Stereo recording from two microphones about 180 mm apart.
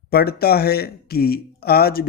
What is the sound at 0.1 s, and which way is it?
Speech, 60° left (ahead or behind).